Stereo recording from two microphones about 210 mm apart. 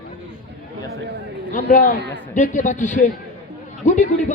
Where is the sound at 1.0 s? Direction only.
55° right (ahead or behind).